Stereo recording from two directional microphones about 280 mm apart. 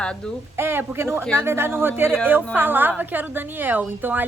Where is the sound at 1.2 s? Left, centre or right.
Centre.